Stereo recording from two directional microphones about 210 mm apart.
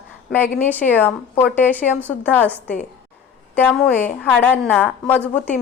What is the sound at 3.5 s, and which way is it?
A woman's voice, 10° left (ahead or behind).